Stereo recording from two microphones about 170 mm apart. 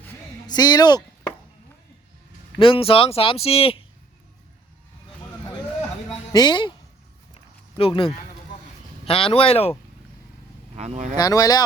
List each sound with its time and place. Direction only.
0.4 s speech: 25° left (ahead or behind)
2.6 s speech: 30° left (ahead or behind)
6.3 s speech: 25° left (ahead or behind)
7.8 s speech: 30° left (ahead or behind)
10.8 s speech: 40° right (ahead or behind)
11.2 s speech: 20° left (ahead or behind)